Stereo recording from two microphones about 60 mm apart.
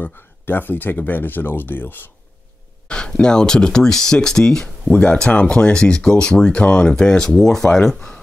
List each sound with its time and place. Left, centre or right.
0.0 s speech: left
2.9 s speech: centre